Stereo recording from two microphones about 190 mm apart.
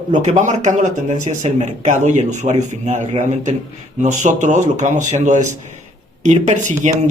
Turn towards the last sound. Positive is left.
turn(degrees=-40)  # may be behind; listen again after turning